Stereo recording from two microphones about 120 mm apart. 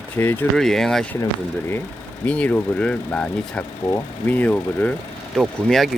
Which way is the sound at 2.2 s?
10° left (ahead or behind).